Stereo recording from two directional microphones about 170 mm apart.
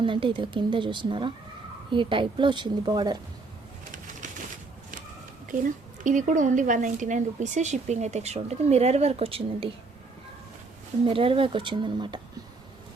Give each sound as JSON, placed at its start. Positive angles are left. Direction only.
{"t": 0.0, "sound": "a woman's voice", "side_deg": -30}
{"t": 6.0, "sound": "speech", "side_deg": -50}
{"t": 11.0, "sound": "speech", "side_deg": -30}